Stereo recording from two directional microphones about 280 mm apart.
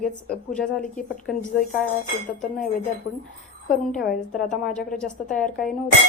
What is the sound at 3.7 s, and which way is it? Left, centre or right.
Speech, centre.